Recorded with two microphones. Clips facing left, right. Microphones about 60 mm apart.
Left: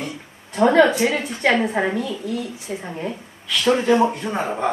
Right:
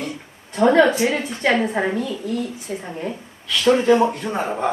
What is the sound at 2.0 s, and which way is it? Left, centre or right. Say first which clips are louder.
Speech: right 1 dB; right.